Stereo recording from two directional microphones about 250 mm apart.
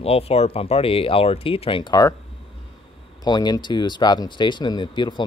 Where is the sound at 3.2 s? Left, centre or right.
Centre.